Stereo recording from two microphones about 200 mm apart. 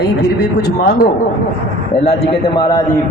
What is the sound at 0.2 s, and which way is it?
Speech, 55° left (ahead or behind).